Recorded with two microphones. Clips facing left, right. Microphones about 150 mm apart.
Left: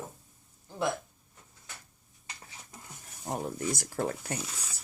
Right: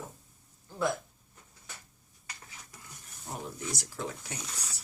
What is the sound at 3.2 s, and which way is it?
Speech, 50° left (ahead or behind).